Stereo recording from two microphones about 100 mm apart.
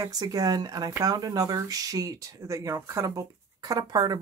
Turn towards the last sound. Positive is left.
turn(degrees=-45)  # may be behind; listen again after turning